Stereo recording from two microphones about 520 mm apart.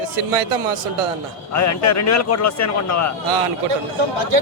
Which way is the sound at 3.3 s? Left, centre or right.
Right.